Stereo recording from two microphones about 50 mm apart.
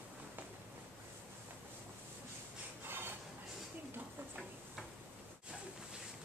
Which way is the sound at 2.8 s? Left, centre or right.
Right.